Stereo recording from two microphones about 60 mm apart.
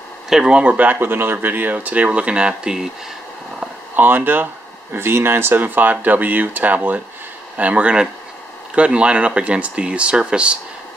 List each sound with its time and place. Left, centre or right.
0.3 s speech: centre
3.9 s speech: right; by 10.6 s centre